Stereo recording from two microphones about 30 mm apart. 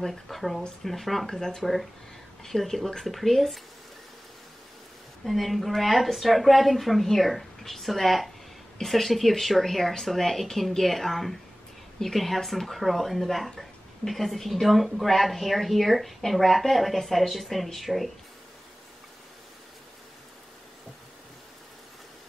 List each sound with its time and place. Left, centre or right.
0.0 s speech: centre
1.2 s speech: centre
1.6 s speech: centre
5.2 s speech: centre